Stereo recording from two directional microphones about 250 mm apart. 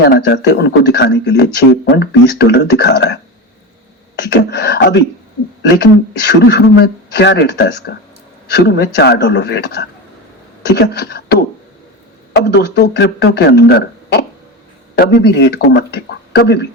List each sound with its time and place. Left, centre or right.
0.3 s speech: left
4.2 s speech: left